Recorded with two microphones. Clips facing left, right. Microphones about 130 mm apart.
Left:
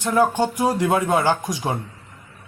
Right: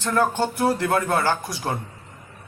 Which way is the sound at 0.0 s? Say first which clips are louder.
Left 3 dB; 10° left (ahead or behind).